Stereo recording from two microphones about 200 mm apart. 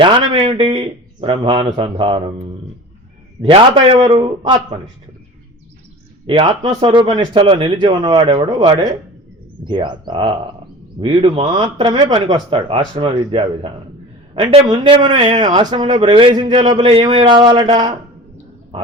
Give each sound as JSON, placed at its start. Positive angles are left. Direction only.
{"t": 0.0, "sound": "speech", "side_deg": -25}
{"t": 4.1, "sound": "speech", "side_deg": -25}
{"t": 6.2, "sound": "speech", "side_deg": -30}
{"t": 6.8, "sound": "speech", "side_deg": -20}
{"t": 15.1, "sound": "a man's voice", "side_deg": -35}
{"t": 15.5, "sound": "speech", "side_deg": -20}